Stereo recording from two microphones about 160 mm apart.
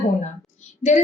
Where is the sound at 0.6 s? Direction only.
45° left (ahead or behind).